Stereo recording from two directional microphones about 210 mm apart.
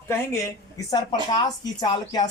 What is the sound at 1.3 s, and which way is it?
Speech, 20° left (ahead or behind).